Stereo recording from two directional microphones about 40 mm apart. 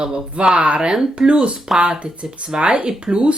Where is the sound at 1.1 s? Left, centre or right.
Right.